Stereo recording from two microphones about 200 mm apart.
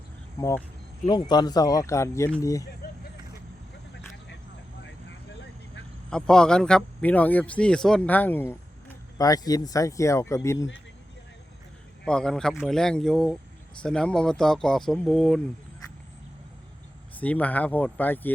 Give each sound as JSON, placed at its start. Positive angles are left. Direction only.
{"t": 0.3, "sound": "speech", "side_deg": 15}
{"t": 6.1, "sound": "a man's voice", "side_deg": 5}
{"t": 12.0, "sound": "a man's voice", "side_deg": 5}
{"t": 17.2, "sound": "speech", "side_deg": 10}